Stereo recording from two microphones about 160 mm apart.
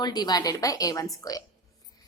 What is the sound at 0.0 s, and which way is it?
A woman's voice, 25° left (ahead or behind).